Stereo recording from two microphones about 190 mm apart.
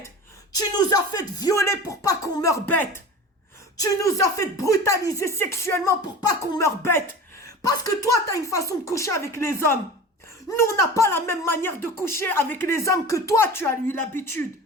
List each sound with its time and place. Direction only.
0.5 s speech: 20° left (ahead or behind)